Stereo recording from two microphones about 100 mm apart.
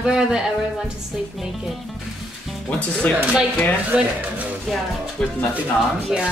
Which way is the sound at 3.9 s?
10° right (ahead or behind).